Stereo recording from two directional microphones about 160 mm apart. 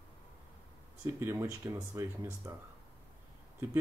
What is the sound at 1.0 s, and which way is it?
Speech, 15° right (ahead or behind).